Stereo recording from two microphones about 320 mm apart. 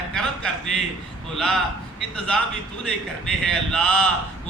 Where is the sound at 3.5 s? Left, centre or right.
Centre.